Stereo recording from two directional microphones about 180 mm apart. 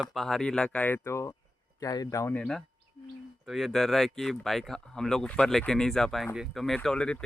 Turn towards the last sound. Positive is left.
turn(degrees=5)  # may be behind; listen again after turning